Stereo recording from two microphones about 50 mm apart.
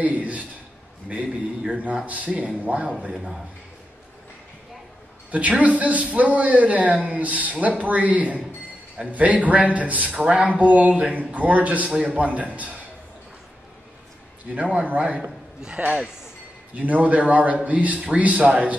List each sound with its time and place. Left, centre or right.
0.0 s a sound: right
1.0 s speech: right
5.3 s speech: right
11.9 s a man's voice: centre
12.2 s a man's voice: right
14.5 s a man's voice: right
16.7 s speech: right